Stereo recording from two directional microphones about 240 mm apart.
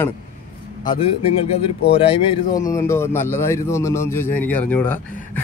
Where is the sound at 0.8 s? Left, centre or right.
Left.